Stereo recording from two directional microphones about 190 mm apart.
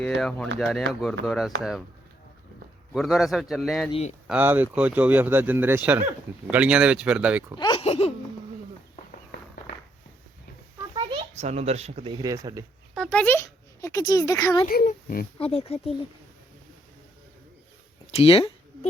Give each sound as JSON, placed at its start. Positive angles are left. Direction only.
{"t": 0.2, "sound": "speech", "side_deg": 5}
{"t": 2.9, "sound": "speech", "side_deg": 0}
{"t": 7.6, "sound": "speech", "side_deg": 25}
{"t": 7.9, "sound": "speech", "side_deg": 35}
{"t": 9.7, "sound": "a sound", "side_deg": 65}
{"t": 10.9, "sound": "speech", "side_deg": -30}
{"t": 12.9, "sound": "speech", "side_deg": 5}
{"t": 14.7, "sound": "a child's voice", "side_deg": 50}
{"t": 15.4, "sound": "speech", "side_deg": 30}
{"t": 18.1, "sound": "a sound", "side_deg": 30}